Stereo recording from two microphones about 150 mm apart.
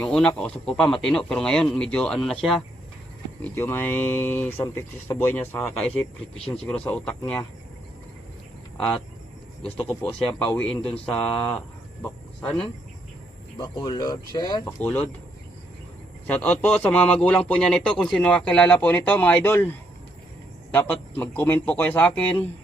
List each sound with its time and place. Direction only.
0.0 s speech: 5° left (ahead or behind)
3.4 s speech: 15° left (ahead or behind)
9.6 s speech: 10° left (ahead or behind)
13.6 s speech: 25° left (ahead or behind)
14.8 s speech: 10° left (ahead or behind)
16.2 s speech: 10° left (ahead or behind)